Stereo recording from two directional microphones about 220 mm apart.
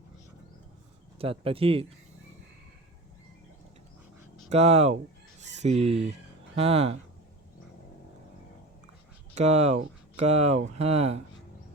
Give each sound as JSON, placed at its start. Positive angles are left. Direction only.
{"t": 1.2, "sound": "speech", "side_deg": -25}
{"t": 4.4, "sound": "speech", "side_deg": -30}
{"t": 9.3, "sound": "speech", "side_deg": -30}